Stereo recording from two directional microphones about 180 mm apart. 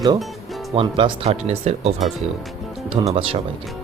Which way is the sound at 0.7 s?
30° right (ahead or behind).